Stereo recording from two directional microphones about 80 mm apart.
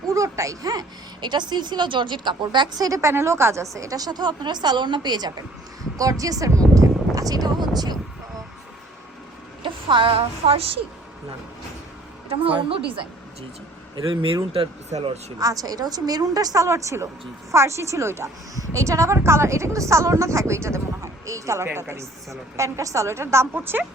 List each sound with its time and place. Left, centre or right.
0.1 s a child's voice: right
6.0 s speech: right
9.6 s music: right
12.4 s a woman's voice: right
14.1 s a woman's voice: right